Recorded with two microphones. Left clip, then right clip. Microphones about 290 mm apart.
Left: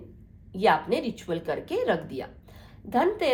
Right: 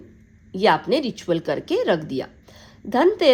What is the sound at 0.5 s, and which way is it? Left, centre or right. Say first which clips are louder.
Speech: right 5 dB; right.